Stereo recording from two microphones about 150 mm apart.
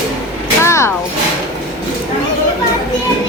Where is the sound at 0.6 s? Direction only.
20° left (ahead or behind).